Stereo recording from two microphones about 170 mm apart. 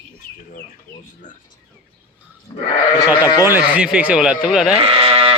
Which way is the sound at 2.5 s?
30° left (ahead or behind).